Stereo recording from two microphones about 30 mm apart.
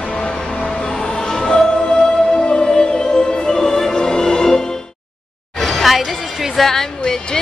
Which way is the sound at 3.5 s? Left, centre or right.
Left.